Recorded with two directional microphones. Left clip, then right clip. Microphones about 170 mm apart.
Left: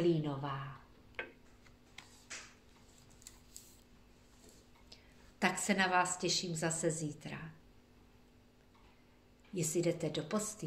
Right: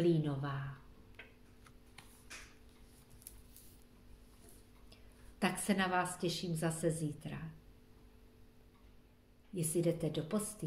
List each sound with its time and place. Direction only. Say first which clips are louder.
0.1 s speech: even; 20° right (ahead or behind)
5.4 s a woman's voice: left 3 dB; 15° right (ahead or behind)
9.6 s a woman's voice: left 1 dB; 20° right (ahead or behind)